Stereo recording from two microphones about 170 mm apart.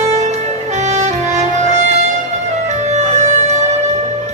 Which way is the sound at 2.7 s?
40° right (ahead or behind).